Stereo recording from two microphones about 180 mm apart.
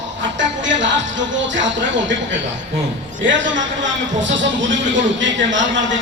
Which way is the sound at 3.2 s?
90° right.